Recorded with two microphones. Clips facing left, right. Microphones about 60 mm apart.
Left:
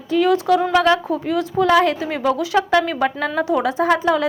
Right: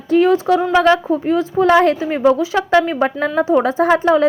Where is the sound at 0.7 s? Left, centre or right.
Right.